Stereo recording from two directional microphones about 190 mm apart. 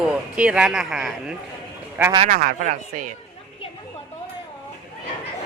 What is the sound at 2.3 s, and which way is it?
Speech, 45° right (ahead or behind).